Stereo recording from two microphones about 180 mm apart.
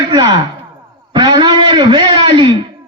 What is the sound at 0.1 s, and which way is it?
A man's voice, 25° right (ahead or behind).